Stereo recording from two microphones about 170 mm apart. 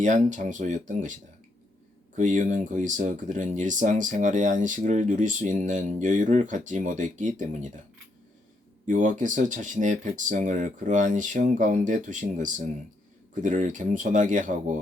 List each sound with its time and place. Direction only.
0.0 s speech: 45° right (ahead or behind)
2.1 s speech: 45° right (ahead or behind)
8.9 s speech: 50° right (ahead or behind)